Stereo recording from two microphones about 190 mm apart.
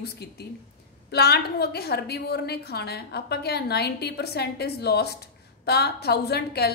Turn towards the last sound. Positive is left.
turn(degrees=55)  # may be behind; listen again after turning